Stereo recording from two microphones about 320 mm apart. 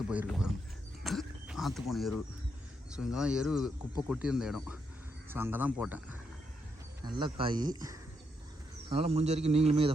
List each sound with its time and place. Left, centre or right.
0.1 s speech: centre
1.0 s a sound: centre
2.9 s speech: centre
7.2 s a man's voice: centre